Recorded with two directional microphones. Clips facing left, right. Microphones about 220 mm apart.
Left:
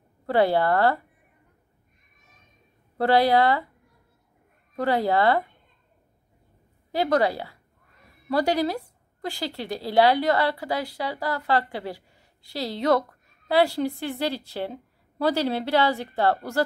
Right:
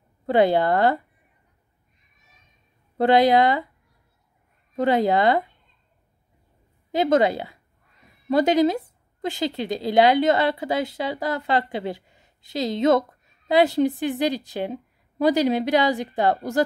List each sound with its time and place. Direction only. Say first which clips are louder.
0.3 s a woman's voice: right 2 dB; 20° right (ahead or behind)
3.0 s a woman's voice: right 3 dB; 20° right (ahead or behind)
4.7 s a woman's voice: right 3 dB; 20° right (ahead or behind)
6.9 s a woman's voice: right 3 dB; 20° right (ahead or behind)